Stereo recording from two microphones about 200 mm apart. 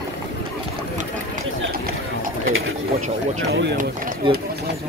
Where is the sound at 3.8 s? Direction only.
40° right (ahead or behind).